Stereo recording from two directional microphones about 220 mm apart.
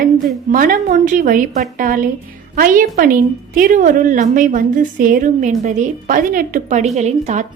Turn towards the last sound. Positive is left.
turn(degrees=-30)  # may be behind; listen again after turning